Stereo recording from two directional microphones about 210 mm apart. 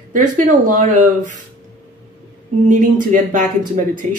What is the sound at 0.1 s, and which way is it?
Speech, 40° right (ahead or behind).